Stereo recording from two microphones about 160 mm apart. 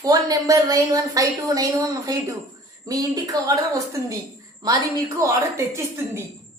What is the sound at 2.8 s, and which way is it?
A woman's voice, 25° right (ahead or behind).